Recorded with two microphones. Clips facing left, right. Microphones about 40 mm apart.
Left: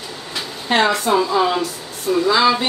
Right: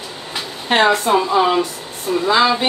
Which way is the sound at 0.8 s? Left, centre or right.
Right.